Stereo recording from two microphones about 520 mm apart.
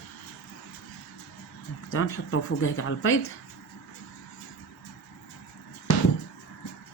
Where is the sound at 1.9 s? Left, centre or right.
Left.